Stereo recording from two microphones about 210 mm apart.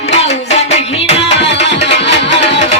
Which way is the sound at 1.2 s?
55° left (ahead or behind).